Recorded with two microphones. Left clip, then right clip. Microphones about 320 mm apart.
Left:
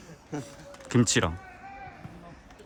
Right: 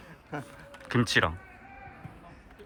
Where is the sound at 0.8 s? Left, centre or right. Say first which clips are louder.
Even; centre.